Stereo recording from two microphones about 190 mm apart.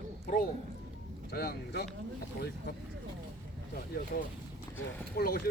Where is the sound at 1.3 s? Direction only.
55° left (ahead or behind).